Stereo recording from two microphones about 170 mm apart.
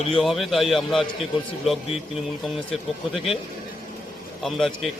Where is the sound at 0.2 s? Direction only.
Centre (ahead or behind).